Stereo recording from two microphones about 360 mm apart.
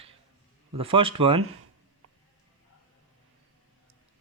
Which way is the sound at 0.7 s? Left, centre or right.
Centre.